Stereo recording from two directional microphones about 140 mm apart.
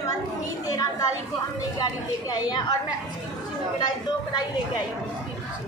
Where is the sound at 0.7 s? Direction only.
25° left (ahead or behind).